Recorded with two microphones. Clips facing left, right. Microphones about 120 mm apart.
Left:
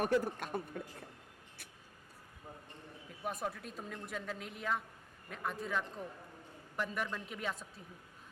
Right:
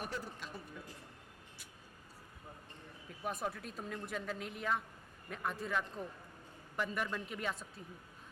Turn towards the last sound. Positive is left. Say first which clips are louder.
# even
turn(degrees=0)  # may be behind; listen again after turning